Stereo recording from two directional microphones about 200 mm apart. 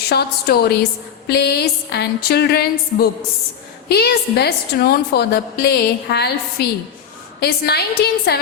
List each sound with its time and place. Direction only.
0.1 s a woman's voice: 55° left (ahead or behind)